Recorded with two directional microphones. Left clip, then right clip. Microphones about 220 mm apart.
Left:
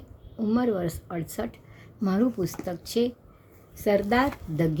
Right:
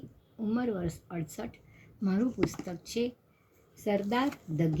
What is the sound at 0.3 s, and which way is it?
Speech, 10° left (ahead or behind).